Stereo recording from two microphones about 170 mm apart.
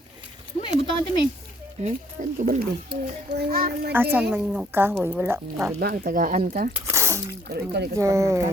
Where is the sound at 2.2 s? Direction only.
50° right (ahead or behind).